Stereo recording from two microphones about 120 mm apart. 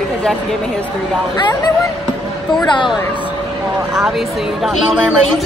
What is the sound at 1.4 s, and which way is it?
Speech, 35° left (ahead or behind).